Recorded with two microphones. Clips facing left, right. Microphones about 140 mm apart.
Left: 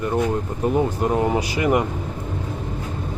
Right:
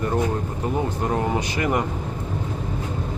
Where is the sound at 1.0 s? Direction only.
10° left (ahead or behind).